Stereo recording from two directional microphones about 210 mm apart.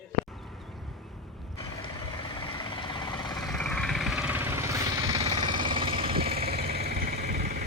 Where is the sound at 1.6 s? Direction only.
25° left (ahead or behind).